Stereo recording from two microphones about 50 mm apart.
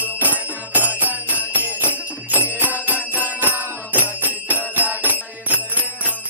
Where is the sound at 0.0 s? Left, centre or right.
Right.